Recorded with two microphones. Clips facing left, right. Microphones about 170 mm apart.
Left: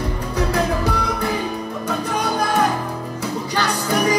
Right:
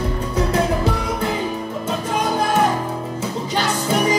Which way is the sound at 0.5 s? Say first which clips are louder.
Right 1 dB; 20° right (ahead or behind).